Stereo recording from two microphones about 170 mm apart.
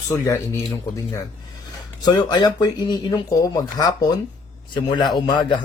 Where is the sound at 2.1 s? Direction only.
25° left (ahead or behind).